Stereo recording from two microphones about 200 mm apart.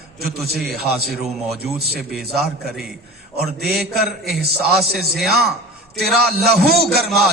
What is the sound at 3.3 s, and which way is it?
A man's voice, 50° right (ahead or behind).